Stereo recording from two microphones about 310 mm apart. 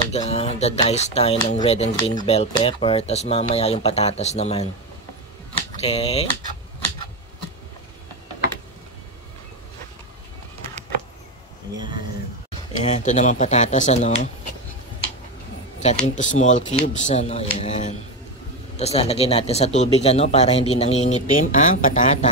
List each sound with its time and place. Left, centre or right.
0.1 s speech: centre
5.8 s speech: centre
12.8 s speech: left
15.8 s speech: left